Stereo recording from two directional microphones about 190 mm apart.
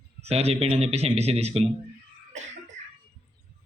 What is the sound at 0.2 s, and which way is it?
Speech, 30° right (ahead or behind).